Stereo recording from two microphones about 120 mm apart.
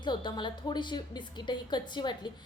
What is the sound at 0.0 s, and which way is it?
A woman's voice, 40° left (ahead or behind).